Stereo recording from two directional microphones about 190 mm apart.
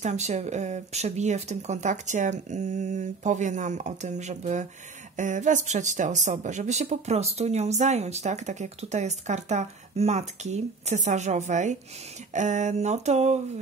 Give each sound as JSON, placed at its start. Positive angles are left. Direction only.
{"t": 0.0, "sound": "speech", "side_deg": -35}